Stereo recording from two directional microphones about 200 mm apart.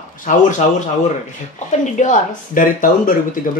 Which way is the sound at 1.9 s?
40° left (ahead or behind).